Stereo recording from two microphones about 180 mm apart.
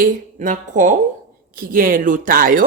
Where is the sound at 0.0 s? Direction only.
50° right (ahead or behind).